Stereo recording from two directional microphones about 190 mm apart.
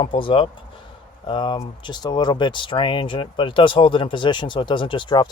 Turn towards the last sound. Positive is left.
turn(degrees=25)  # may be behind; listen again after turning